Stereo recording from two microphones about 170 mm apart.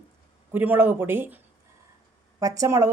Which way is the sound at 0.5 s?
10° right (ahead or behind).